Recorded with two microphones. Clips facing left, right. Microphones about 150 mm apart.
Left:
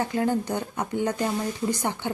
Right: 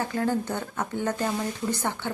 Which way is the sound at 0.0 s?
20° left (ahead or behind).